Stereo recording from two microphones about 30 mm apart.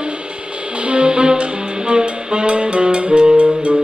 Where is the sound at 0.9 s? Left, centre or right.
Right.